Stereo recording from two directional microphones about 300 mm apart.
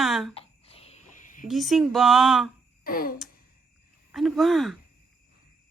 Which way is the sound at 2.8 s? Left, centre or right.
Left.